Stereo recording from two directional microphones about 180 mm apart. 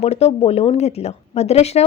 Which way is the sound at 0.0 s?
35° left (ahead or behind).